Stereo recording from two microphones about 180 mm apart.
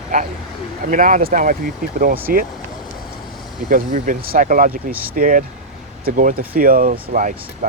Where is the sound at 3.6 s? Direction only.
50° right (ahead or behind).